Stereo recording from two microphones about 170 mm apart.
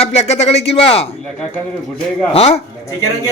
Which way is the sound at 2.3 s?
35° left (ahead or behind).